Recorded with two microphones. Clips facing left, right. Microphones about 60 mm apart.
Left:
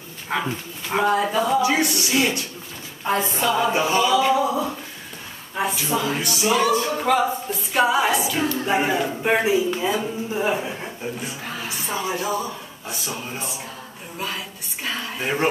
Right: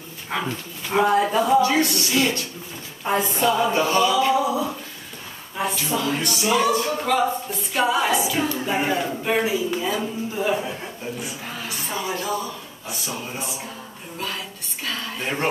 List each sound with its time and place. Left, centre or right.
0.3 s a capella: centre
1.0 s a man's voice: centre
1.6 s a capella: centre
4.2 s a man's voice: centre
6.7 s a capella: centre
9.2 s speech: left
11.2 s a man's voice: centre
11.6 s speech: centre
12.8 s a man's voice: centre
14.9 s a sound: centre